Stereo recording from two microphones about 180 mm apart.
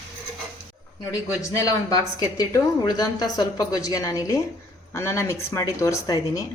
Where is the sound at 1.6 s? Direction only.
20° left (ahead or behind).